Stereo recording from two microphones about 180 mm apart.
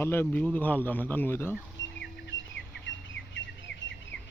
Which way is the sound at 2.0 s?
85° left.